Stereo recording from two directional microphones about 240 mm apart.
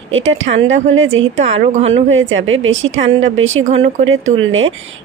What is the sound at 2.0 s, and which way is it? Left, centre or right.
A woman's voice, right.